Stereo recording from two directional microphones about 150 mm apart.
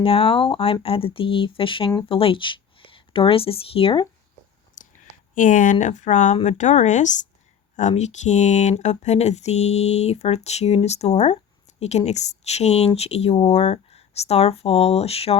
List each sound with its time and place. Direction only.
0.0 s speech: 40° left (ahead or behind)
4.7 s clicking: 60° left (ahead or behind)
5.8 s speech: 55° left (ahead or behind)